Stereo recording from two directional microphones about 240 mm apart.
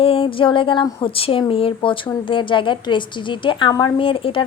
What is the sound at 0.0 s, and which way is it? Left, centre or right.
Speech, left.